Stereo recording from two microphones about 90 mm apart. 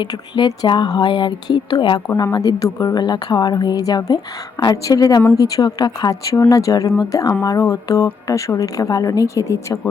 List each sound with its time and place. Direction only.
0.0 s speech: 50° left (ahead or behind)
2.1 s a woman's voice: 50° left (ahead or behind)